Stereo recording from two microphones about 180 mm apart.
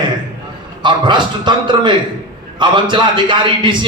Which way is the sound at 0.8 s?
25° right (ahead or behind).